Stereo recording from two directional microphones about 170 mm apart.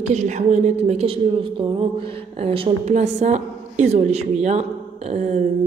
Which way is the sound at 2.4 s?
35° right (ahead or behind).